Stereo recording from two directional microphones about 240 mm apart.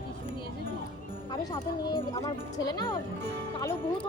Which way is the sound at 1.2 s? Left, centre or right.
Centre.